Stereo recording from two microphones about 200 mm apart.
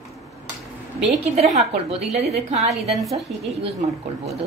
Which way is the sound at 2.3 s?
35° right (ahead or behind).